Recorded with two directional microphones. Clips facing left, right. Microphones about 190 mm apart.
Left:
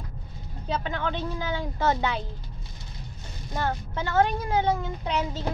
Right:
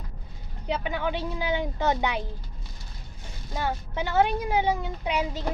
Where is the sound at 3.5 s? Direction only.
15° right (ahead or behind).